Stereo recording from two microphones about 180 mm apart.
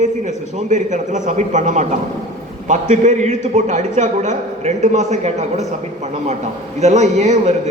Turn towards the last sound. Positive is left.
turn(degrees=-40)  # may be behind; listen again after turning